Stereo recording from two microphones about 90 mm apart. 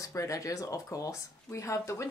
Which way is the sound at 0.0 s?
35° left (ahead or behind).